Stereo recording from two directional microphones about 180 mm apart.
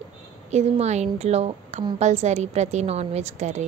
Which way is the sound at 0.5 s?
40° right (ahead or behind).